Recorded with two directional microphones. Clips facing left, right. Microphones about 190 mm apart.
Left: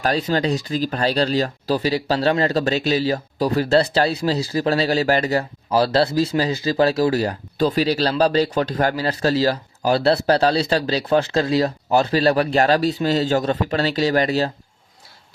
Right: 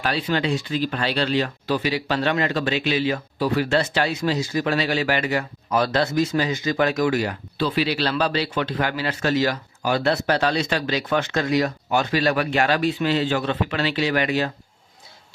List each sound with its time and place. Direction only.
0.0 s speech: 40° left (ahead or behind)